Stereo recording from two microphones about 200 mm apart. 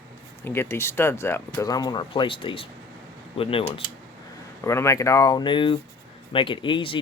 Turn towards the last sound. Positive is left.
turn(degrees=25)  # may be behind; listen again after turning